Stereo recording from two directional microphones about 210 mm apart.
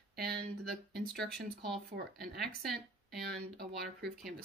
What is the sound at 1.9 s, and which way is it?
Speech, 50° right (ahead or behind).